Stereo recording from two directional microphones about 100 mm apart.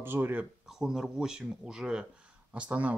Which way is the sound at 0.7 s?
5° right (ahead or behind).